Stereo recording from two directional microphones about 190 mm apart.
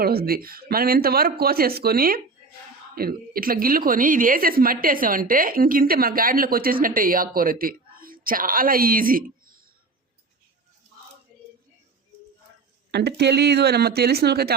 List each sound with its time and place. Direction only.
0.0 s a woman's voice: 55° right (ahead or behind)
12.9 s speech: 60° right (ahead or behind)